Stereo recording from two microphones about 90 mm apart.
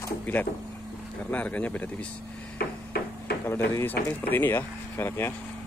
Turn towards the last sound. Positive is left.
turn(degrees=25)  # may be behind; listen again after turning